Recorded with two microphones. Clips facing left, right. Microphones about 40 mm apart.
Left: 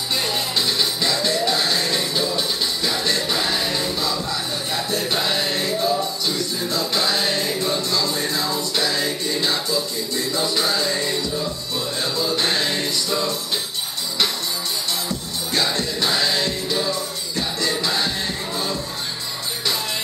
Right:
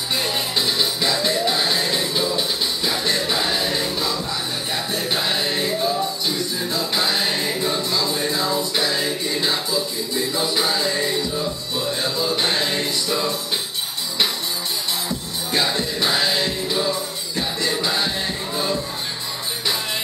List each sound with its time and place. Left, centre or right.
0.1 s music: centre
4.9 s music: centre
12.0 s music: centre
15.0 s music: centre